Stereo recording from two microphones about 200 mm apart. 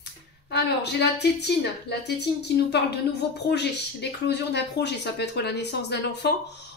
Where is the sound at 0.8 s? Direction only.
55° left (ahead or behind).